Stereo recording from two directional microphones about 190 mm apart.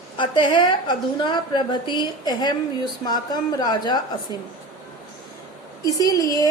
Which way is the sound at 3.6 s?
20° left (ahead or behind).